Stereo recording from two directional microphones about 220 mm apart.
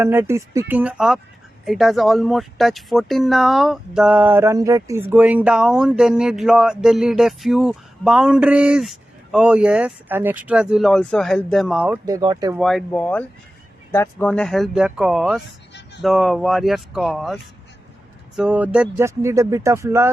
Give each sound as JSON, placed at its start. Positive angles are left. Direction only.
{"t": 0.0, "sound": "speech", "side_deg": -10}
{"t": 12.0, "sound": "speech", "side_deg": -20}
{"t": 12.5, "sound": "speech", "side_deg": 0}
{"t": 18.3, "sound": "speech", "side_deg": -5}